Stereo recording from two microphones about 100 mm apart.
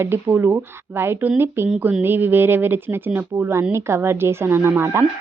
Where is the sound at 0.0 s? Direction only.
20° right (ahead or behind).